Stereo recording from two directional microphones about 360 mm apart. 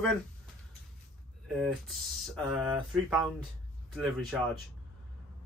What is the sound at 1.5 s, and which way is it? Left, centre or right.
Speech, centre.